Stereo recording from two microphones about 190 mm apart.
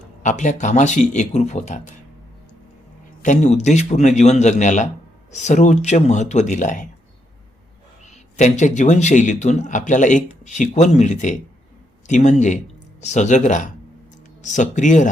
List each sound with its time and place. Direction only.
0.2 s speech: 40° left (ahead or behind)
3.2 s speech: 40° left (ahead or behind)
8.4 s speech: 40° left (ahead or behind)